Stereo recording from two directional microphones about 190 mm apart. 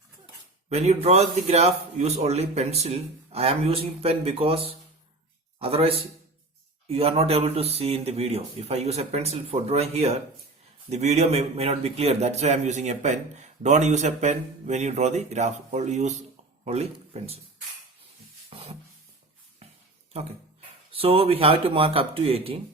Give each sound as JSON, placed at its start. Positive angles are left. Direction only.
{"t": 0.7, "sound": "a man's voice", "side_deg": -35}
{"t": 18.5, "sound": "a sound", "side_deg": -30}
{"t": 20.9, "sound": "speech", "side_deg": -30}